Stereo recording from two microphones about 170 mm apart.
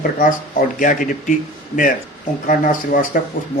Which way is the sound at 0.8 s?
50° left (ahead or behind).